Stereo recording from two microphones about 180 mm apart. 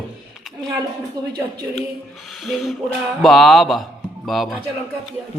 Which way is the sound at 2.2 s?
Centre (ahead or behind).